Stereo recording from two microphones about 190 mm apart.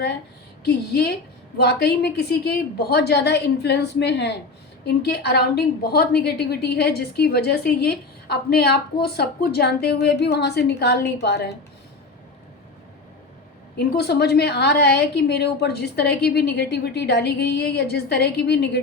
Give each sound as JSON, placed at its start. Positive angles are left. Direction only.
{"t": 0.7, "sound": "a woman's voice", "side_deg": 60}
{"t": 13.7, "sound": "a woman's voice", "side_deg": 60}